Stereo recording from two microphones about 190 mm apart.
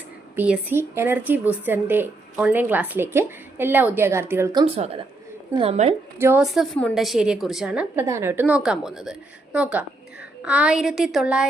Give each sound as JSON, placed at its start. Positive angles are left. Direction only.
{"t": 0.3, "sound": "a woman's voice", "side_deg": -10}
{"t": 4.6, "sound": "a woman's voice", "side_deg": -30}
{"t": 6.1, "sound": "a woman's voice", "side_deg": -15}
{"t": 6.4, "sound": "a woman's voice", "side_deg": 0}